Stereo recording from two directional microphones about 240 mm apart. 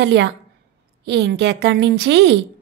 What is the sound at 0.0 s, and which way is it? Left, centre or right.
A woman's voice, right.